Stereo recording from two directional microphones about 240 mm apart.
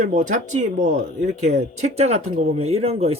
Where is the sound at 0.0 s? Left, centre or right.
Right.